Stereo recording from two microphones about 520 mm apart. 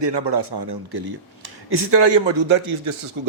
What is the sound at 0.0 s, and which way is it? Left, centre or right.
A man's voice, right.